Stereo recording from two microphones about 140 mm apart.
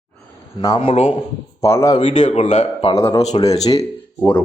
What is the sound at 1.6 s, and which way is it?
Speech, 20° left (ahead or behind).